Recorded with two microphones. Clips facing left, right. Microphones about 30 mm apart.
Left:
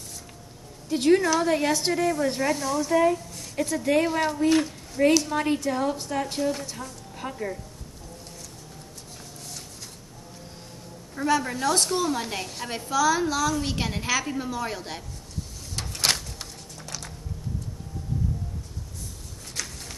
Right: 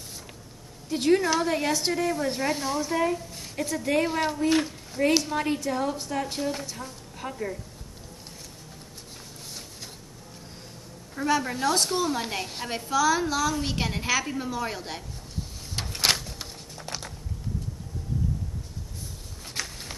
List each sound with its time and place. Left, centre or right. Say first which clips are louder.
0.8 s a woman's voice: left 2 dB; centre
2.5 s speech: left 2 dB; right
2.8 s a woman's voice: left 4 dB; centre
11.1 s a woman's voice: left 1 dB; centre
15.7 s a sound: right 1 dB; centre
19.6 s a sound: right 1 dB; right